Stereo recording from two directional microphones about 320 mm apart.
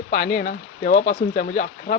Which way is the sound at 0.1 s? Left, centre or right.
Left.